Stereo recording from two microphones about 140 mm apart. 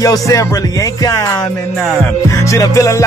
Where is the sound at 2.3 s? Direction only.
20° left (ahead or behind).